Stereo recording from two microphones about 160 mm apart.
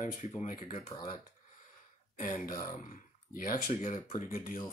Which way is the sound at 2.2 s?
55° left (ahead or behind).